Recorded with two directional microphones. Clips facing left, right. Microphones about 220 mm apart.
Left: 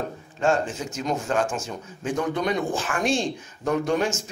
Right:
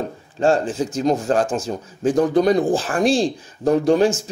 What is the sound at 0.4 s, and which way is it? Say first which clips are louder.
Speech: right 5 dB; 35° right (ahead or behind).